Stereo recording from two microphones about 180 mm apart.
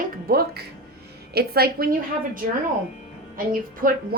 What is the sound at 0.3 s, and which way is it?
A woman's voice, 60° right (ahead or behind).